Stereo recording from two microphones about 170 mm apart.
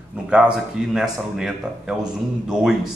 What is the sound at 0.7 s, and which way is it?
A man's voice, 5° right (ahead or behind).